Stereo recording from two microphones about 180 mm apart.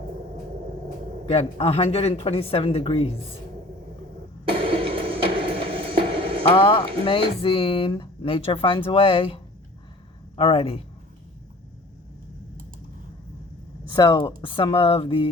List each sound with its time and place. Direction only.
1.3 s speech: 35° left (ahead or behind)
4.4 s music: 30° right (ahead or behind)
6.5 s speech: 30° left (ahead or behind)
13.8 s speech: 25° left (ahead or behind)